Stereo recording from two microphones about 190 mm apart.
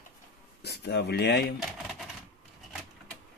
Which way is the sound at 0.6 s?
60° left (ahead or behind).